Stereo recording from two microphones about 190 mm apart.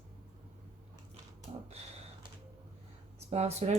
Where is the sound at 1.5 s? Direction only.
30° right (ahead or behind).